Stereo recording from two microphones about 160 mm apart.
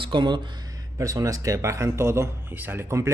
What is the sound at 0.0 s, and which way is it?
Speech, 30° right (ahead or behind).